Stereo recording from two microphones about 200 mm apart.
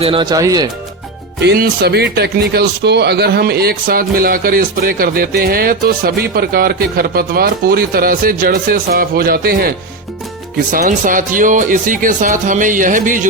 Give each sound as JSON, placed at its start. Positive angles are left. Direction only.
{"t": 0.0, "sound": "speech", "side_deg": -25}
{"t": 1.4, "sound": "speech", "side_deg": -50}